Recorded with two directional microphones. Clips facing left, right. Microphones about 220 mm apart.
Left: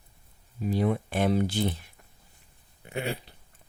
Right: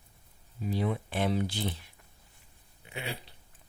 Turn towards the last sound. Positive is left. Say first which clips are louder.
# left 7 dB
turn(degrees=50)  # may be behind; listen again after turning